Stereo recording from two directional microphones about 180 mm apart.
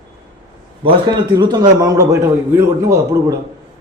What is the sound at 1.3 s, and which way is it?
A man's voice, 25° right (ahead or behind).